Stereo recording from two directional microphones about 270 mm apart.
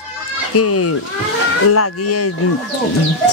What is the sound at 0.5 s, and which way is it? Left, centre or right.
Speech, left.